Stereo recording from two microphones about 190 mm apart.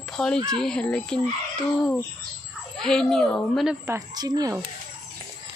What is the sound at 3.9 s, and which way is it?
Speech, 20° right (ahead or behind).